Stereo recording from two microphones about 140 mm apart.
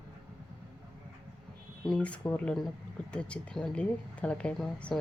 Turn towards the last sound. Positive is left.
turn(degrees=10)  # may be behind; listen again after turning